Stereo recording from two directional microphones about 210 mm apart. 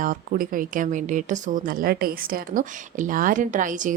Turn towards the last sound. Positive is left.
turn(degrees=-40)  # may be behind; listen again after turning